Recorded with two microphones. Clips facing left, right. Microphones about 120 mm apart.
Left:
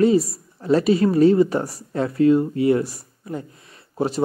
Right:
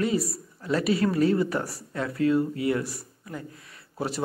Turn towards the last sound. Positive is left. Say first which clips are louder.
# left 9 dB
turn(degrees=25)  # may be behind; listen again after turning